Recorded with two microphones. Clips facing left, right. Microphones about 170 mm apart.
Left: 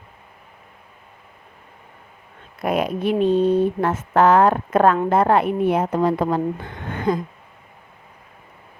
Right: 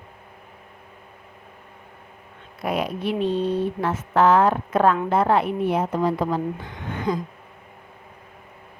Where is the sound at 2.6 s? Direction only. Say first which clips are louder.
Left 4 dB; 50° left (ahead or behind).